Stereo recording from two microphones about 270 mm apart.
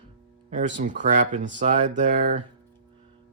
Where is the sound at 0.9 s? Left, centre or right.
Right.